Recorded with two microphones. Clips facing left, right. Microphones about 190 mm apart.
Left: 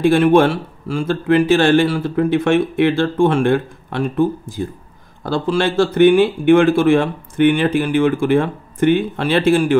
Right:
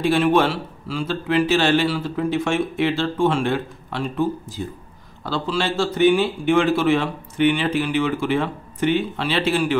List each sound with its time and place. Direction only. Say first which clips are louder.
0.0 s speech: left 6 dB; 50° left (ahead or behind)